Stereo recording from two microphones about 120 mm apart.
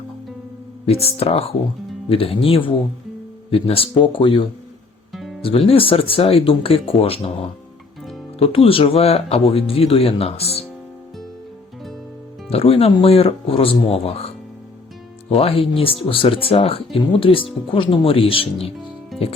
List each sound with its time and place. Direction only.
0.9 s speech: 55° left (ahead or behind)
5.1 s music: centre (ahead or behind)
5.4 s speech: 50° left (ahead or behind)
8.4 s speech: 50° left (ahead or behind)
12.5 s speech: 55° left (ahead or behind)
19.1 s music: centre (ahead or behind)